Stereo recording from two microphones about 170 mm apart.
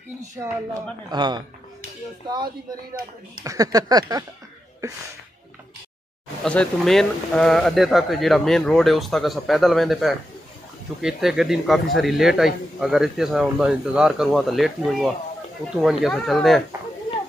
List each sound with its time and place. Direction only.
1.1 s speech: 25° right (ahead or behind)
6.4 s a man's voice: 5° left (ahead or behind)